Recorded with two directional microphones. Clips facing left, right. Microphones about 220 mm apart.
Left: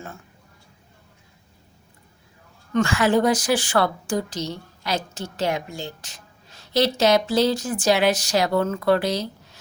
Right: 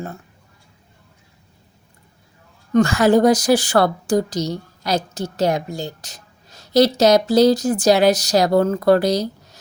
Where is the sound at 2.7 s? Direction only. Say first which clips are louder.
Right 5 dB; 40° right (ahead or behind).